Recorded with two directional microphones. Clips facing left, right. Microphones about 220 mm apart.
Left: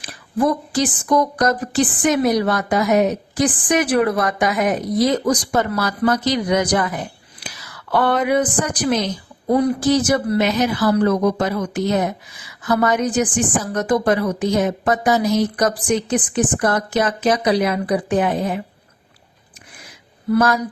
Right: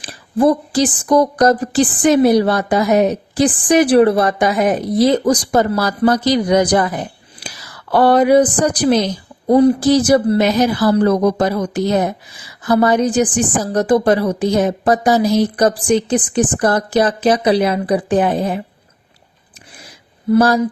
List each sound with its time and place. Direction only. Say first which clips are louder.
0.0 s a woman's voice: right 5 dB; 30° right (ahead or behind)
20.3 s a woman's voice: right 4 dB; 30° right (ahead or behind)